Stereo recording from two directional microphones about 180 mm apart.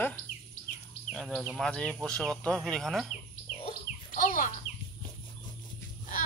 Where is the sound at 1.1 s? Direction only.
Centre (ahead or behind).